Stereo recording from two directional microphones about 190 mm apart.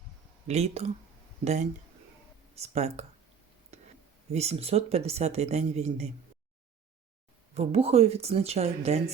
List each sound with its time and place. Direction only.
0.4 s speech: 35° right (ahead or behind)
2.6 s speech: 35° right (ahead or behind)
4.3 s speech: 35° right (ahead or behind)
7.5 s speech: 35° right (ahead or behind)